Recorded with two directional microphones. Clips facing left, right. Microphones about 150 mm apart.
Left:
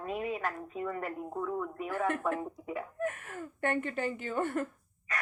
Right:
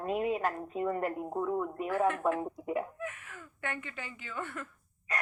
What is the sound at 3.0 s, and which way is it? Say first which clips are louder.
Speech: left 6 dB; 50° left (ahead or behind).